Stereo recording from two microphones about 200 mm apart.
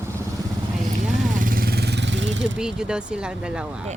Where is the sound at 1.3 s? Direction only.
45° right (ahead or behind); by 2.5 s 65° right (ahead or behind).